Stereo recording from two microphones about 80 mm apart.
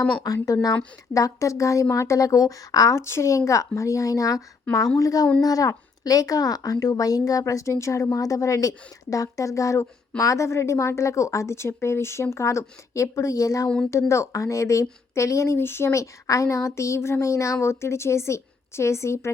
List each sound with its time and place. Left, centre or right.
0.4 s a woman's voice: left
3.0 s a woman's voice: left